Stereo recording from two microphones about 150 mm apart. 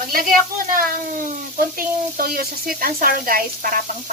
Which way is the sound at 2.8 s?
70° right (ahead or behind).